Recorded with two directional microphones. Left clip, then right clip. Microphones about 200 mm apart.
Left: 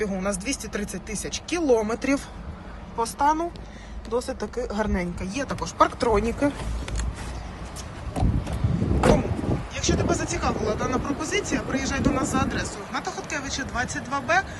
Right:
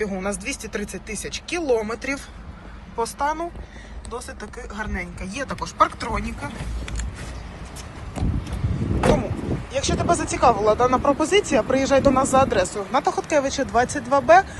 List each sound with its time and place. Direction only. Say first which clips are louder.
0.0 s speech: right 1 dB; 15° left (ahead or behind)
3.0 s speech: left 1 dB; 15° left (ahead or behind)
5.2 s speech: right 1 dB; 15° left (ahead or behind)
9.0 s vehicle: right 1 dB; centre (ahead or behind)
9.7 s speech: right 5 dB; 10° right (ahead or behind)